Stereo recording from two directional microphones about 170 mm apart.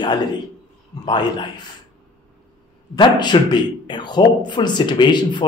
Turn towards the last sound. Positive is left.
turn(degrees=25)  # may be behind; listen again after turning